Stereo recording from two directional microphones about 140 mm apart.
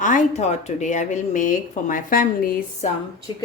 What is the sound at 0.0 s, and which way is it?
Speech, 65° left (ahead or behind).